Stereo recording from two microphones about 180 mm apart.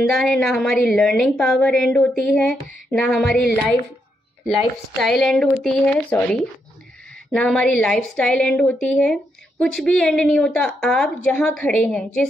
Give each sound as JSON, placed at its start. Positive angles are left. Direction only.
{"t": 0.0, "sound": "a woman's voice", "side_deg": 0}
{"t": 4.9, "sound": "a woman's voice", "side_deg": 0}